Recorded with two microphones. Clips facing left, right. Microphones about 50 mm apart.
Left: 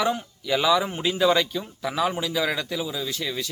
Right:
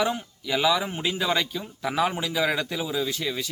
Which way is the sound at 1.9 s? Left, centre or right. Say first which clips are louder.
Even; right.